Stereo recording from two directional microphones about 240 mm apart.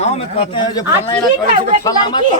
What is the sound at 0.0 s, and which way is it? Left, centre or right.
A man's voice, left.